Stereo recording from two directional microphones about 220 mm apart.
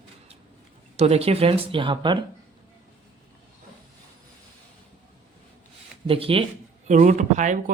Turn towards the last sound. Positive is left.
turn(degrees=-35)  # may be behind; listen again after turning